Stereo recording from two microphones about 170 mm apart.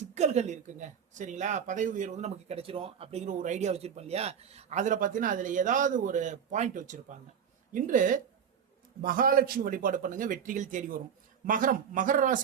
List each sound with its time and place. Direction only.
0.0 s speech: 40° right (ahead or behind)